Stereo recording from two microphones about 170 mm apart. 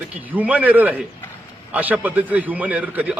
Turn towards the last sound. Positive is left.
turn(degrees=-10)  # may be behind; listen again after turning